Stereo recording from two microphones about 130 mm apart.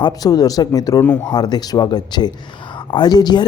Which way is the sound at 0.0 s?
30° left (ahead or behind).